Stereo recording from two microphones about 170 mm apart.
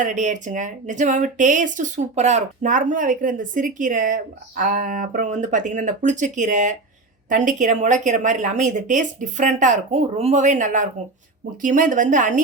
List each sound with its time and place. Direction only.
0.0 s speech: 45° right (ahead or behind)